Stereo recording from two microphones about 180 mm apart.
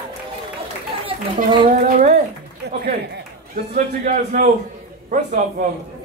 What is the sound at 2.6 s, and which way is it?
Speech, 70° right (ahead or behind).